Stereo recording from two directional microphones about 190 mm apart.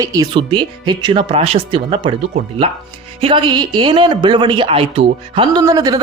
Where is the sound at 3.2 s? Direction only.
25° right (ahead or behind).